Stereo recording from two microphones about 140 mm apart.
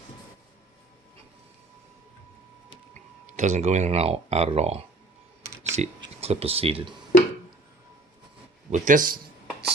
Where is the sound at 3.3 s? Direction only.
60° right (ahead or behind); by 6.9 s 45° right (ahead or behind).